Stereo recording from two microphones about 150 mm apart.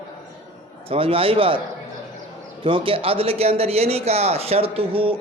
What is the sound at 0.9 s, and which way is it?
Speech, 40° right (ahead or behind).